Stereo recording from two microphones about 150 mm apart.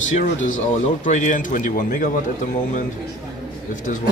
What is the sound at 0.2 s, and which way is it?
A man's voice, 55° left (ahead or behind).